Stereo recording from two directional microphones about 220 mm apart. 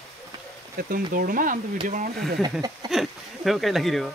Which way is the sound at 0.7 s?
40° right (ahead or behind).